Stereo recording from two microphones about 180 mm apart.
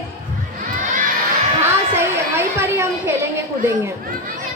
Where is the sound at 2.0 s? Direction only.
15° right (ahead or behind).